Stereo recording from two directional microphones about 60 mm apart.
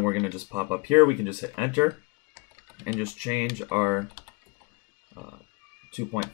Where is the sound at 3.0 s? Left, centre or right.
Right.